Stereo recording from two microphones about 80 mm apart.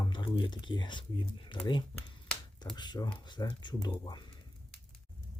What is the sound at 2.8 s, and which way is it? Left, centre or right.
Speech, left.